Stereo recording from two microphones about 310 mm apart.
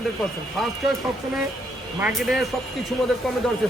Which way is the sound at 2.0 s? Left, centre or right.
Centre.